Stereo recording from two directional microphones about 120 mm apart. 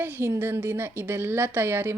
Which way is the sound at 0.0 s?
20° right (ahead or behind).